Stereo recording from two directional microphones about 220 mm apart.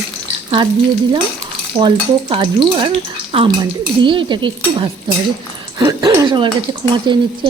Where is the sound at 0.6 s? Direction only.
20° right (ahead or behind).